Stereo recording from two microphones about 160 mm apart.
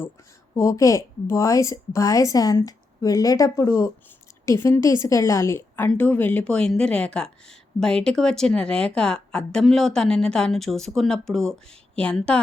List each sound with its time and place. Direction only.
0.5 s a woman's voice: 20° left (ahead or behind)